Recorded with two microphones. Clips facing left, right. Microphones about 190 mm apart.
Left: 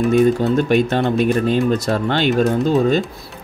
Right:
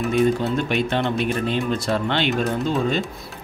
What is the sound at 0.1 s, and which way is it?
Speech, 40° left (ahead or behind).